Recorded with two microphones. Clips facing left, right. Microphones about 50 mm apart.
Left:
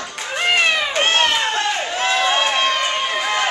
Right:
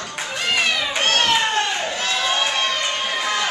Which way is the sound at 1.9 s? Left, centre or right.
Left.